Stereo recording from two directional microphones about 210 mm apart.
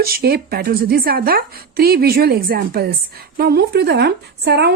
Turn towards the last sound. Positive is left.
turn(degrees=-50)  # may be behind; listen again after turning